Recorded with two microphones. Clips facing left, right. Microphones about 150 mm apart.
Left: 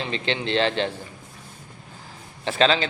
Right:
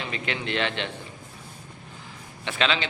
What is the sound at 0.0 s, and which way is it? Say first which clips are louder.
Speech: left 4 dB; 30° left (ahead or behind).